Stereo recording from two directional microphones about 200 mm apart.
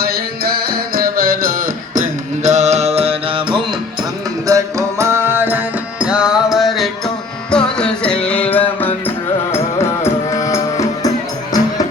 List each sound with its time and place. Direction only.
0.0 s music: 50° right (ahead or behind); by 3.6 s 25° right (ahead or behind)
4.4 s music: 15° right (ahead or behind); by 11.7 s 20° left (ahead or behind)